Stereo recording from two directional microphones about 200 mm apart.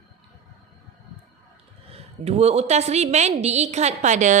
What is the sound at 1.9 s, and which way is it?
A woman's voice, 30° right (ahead or behind).